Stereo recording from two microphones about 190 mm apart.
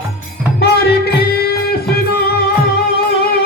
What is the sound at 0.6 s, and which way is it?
Music, 55° left (ahead or behind).